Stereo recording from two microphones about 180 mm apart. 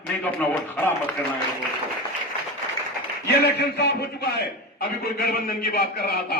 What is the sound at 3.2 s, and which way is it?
A man's voice, 65° left (ahead or behind).